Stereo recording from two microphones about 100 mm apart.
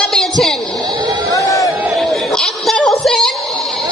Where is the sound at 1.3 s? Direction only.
35° left (ahead or behind).